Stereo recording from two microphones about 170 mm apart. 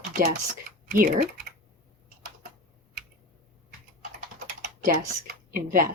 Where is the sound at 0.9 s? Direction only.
55° right (ahead or behind).